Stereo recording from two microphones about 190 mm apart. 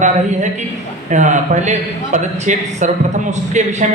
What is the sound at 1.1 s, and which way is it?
A man's voice, 40° right (ahead or behind).